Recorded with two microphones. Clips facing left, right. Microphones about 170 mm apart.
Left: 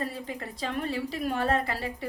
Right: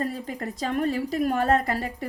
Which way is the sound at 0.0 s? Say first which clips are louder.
Right 5 dB; 45° right (ahead or behind).